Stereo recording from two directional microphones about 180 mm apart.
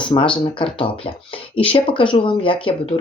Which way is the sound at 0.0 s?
25° left (ahead or behind).